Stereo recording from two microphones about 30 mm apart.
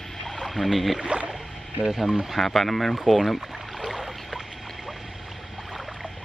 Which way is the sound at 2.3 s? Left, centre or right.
Centre.